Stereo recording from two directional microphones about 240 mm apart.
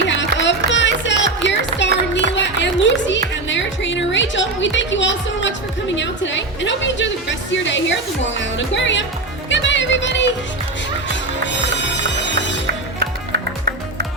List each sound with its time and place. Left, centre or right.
0.1 s music: left